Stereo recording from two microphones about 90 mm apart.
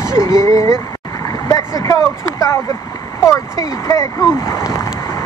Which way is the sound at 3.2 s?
35° left (ahead or behind).